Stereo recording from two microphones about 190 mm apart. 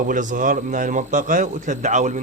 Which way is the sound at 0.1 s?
45° right (ahead or behind).